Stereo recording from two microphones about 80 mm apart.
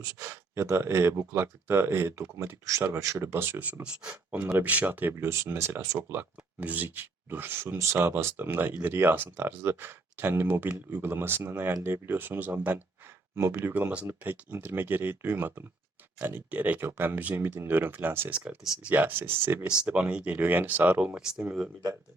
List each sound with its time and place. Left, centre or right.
0.2 s speech: right
5.1 s speech: right
19.8 s speech: centre